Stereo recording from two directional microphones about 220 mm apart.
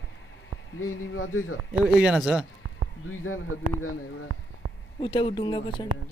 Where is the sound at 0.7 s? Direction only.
70° left (ahead or behind).